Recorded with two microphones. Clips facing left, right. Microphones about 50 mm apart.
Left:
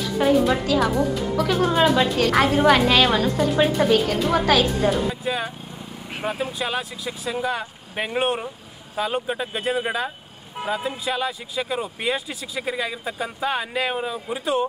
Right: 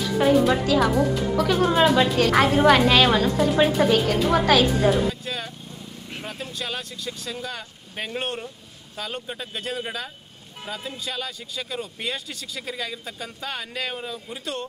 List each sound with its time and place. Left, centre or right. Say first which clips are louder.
0.0 s a woman's voice: even; centre
5.2 s speech: left 6 dB; centre
14.3 s speech: left 10 dB; centre